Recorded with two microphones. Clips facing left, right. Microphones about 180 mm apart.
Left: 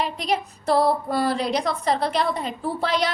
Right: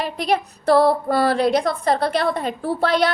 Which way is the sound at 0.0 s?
60° right (ahead or behind).